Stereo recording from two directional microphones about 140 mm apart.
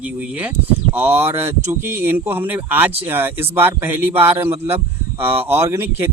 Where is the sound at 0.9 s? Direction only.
15° right (ahead or behind).